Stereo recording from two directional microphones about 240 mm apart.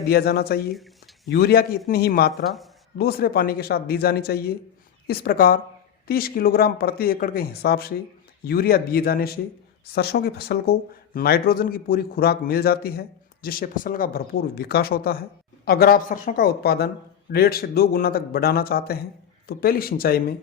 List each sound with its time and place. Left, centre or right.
0.1 s speech: left